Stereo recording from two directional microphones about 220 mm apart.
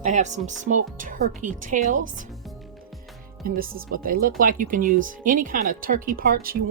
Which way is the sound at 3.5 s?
40° right (ahead or behind).